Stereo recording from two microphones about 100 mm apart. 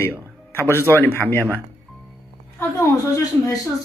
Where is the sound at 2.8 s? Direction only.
35° left (ahead or behind).